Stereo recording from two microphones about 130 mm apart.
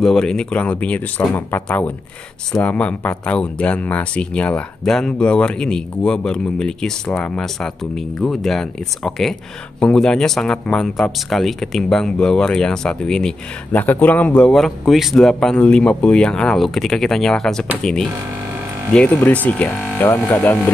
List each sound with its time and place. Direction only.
0.0 s speech: 5° left (ahead or behind)
18.9 s speech: 10° left (ahead or behind)